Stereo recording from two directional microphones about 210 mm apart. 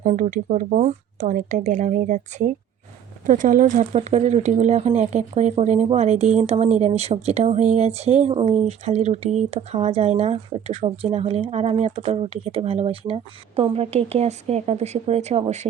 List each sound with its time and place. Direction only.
0.0 s speech: 40° right (ahead or behind)